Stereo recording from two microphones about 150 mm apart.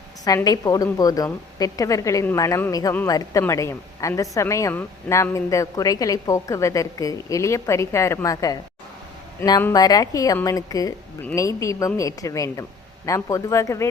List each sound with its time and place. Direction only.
0.4 s a woman's voice: 25° left (ahead or behind)